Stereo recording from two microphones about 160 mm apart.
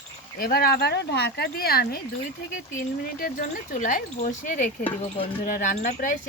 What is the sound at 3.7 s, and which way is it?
Speech, 55° left (ahead or behind).